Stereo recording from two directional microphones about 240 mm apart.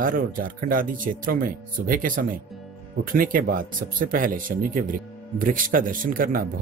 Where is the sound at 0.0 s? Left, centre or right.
Right.